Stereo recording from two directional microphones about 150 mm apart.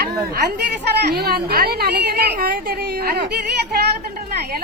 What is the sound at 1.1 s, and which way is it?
A woman's voice, 90° right.